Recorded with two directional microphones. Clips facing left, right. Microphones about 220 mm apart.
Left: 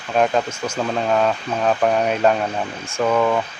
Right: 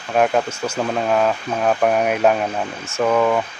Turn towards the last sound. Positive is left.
turn(degrees=-5)  # may be behind; listen again after turning